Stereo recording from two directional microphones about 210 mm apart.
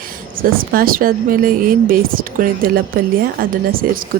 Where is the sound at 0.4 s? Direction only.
45° right (ahead or behind).